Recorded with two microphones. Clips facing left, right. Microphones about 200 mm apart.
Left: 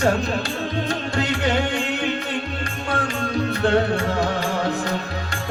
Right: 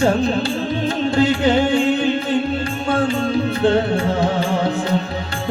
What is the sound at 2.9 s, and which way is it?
Music, 25° right (ahead or behind).